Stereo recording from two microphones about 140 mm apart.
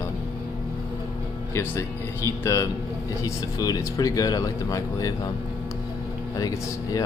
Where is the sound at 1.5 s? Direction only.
20° left (ahead or behind).